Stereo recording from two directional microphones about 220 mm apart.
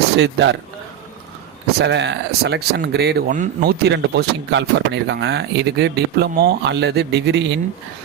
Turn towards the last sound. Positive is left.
turn(degrees=-50)  # may be behind; listen again after turning